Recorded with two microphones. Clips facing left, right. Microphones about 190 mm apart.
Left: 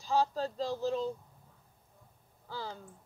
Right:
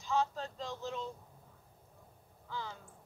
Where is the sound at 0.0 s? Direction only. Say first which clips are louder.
Left 4 dB; 35° left (ahead or behind).